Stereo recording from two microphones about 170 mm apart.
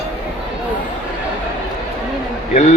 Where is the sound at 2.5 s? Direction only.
40° left (ahead or behind).